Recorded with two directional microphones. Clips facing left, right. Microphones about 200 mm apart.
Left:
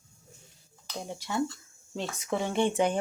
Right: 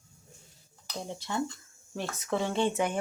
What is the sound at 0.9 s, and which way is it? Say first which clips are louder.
Speech: left 2 dB; 10° left (ahead or behind).